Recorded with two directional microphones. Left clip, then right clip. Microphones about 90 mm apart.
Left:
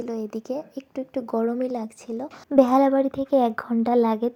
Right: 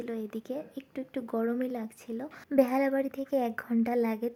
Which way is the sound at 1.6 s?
30° left (ahead or behind).